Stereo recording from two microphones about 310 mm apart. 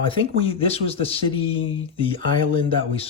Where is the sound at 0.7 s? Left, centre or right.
Centre.